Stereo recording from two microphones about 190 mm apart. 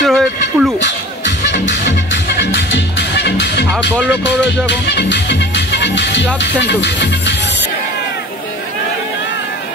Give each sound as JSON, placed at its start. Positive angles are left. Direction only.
{"t": 0.0, "sound": "a sound", "side_deg": 0}
{"t": 0.7, "sound": "music", "side_deg": 70}
{"t": 4.6, "sound": "music", "side_deg": 65}